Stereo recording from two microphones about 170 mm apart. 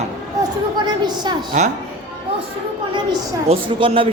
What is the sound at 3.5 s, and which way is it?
Speech, 30° right (ahead or behind).